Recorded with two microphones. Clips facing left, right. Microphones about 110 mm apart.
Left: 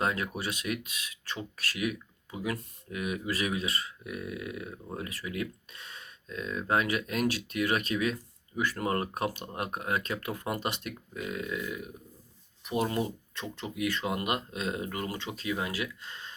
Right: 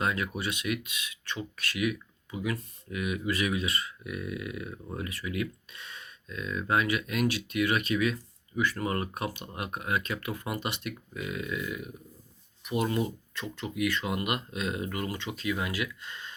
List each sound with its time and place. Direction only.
0.0 s speech: 40° left (ahead or behind)